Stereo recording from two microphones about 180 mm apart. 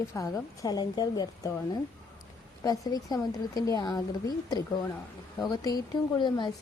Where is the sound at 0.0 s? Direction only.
15° left (ahead or behind).